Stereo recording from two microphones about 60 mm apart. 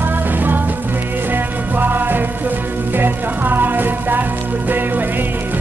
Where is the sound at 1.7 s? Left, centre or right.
Right.